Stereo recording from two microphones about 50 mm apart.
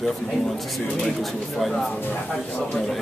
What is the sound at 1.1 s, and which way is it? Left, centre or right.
Speech, centre.